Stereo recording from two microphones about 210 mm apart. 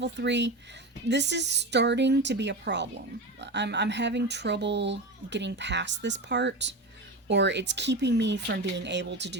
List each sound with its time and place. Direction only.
0.0 s speech: 55° right (ahead or behind)